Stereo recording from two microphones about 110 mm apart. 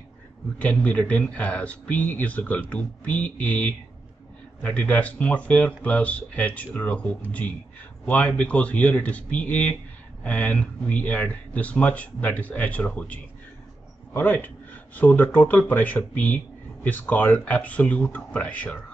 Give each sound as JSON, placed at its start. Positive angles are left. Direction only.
{"t": 0.6, "sound": "speech", "side_deg": 15}